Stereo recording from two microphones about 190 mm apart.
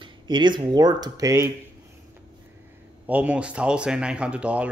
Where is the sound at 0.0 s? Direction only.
25° right (ahead or behind).